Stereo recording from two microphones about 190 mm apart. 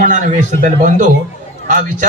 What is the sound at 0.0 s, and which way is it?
Speech, 40° right (ahead or behind).